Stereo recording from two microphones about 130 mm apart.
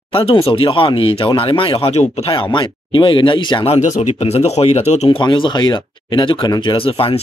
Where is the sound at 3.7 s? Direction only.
65° left (ahead or behind).